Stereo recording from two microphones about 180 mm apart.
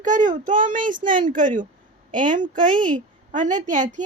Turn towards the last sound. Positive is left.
turn(degrees=-45)  # may be behind; listen again after turning